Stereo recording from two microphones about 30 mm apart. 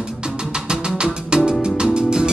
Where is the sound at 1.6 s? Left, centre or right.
Right.